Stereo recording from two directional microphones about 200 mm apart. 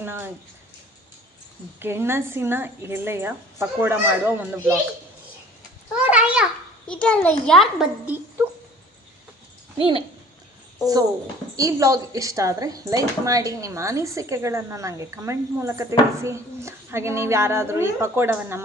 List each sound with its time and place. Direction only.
0.0 s speech: 10° right (ahead or behind)
1.8 s speech: 10° right (ahead or behind)
6.0 s a child's voice: 5° right (ahead or behind)
9.7 s speech: 25° right (ahead or behind)
11.5 s speech: 15° right (ahead or behind)